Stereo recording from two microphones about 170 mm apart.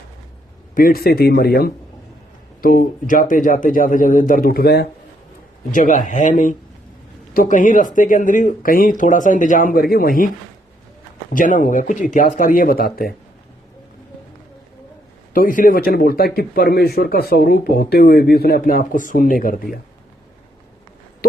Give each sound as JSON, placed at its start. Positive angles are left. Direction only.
{"t": 0.7, "sound": "speech", "side_deg": 55}
{"t": 5.7, "sound": "speech", "side_deg": 50}
{"t": 11.3, "sound": "speech", "side_deg": 50}
{"t": 15.3, "sound": "speech", "side_deg": 55}